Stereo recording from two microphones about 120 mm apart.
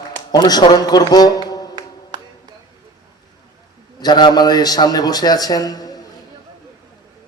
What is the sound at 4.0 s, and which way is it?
A man's voice, 35° left (ahead or behind).